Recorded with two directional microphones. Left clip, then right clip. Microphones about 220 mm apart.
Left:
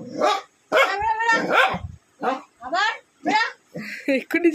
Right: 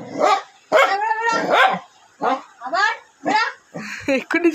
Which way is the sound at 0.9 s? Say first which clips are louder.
Right 1 dB; 15° right (ahead or behind).